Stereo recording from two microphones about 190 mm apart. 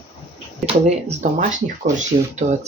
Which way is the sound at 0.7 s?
35° right (ahead or behind).